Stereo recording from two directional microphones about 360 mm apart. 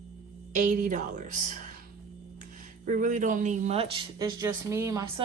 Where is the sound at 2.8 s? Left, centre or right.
Right.